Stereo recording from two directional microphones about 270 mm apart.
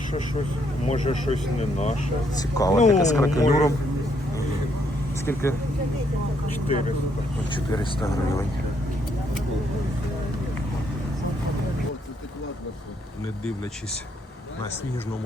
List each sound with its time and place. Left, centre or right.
0.9 s speech: left
2.4 s speech: centre
5.2 s speech: centre
6.7 s speech: left